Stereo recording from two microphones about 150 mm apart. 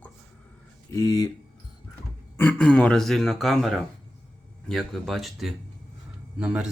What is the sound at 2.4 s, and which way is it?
Speech, 10° left (ahead or behind).